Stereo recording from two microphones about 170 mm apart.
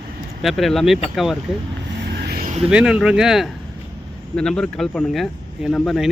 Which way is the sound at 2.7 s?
5° right (ahead or behind).